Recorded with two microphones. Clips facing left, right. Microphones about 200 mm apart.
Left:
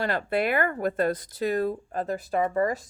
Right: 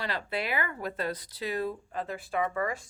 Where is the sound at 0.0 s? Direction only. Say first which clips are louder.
Left 8 dB; 50° left (ahead or behind).